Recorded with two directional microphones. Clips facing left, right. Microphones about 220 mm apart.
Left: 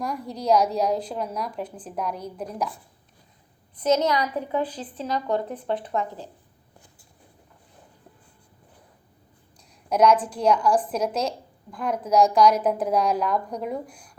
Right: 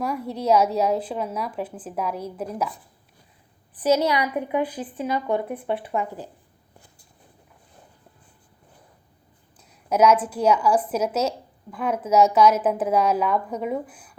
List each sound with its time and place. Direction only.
0.0 s a woman's voice: 5° right (ahead or behind)
3.8 s a woman's voice: 10° right (ahead or behind)
9.6 s a woman's voice: 5° right (ahead or behind)